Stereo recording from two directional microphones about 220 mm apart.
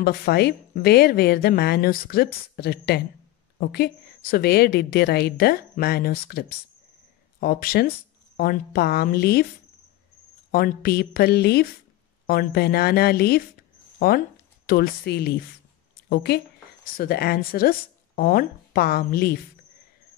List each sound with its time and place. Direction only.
0.0 s a woman's voice: 45° left (ahead or behind)
10.5 s a woman's voice: 45° left (ahead or behind)